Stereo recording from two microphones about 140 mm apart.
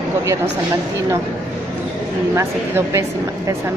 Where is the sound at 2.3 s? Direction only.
20° right (ahead or behind).